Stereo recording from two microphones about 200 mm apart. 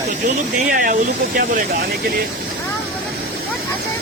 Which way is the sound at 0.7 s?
45° right (ahead or behind).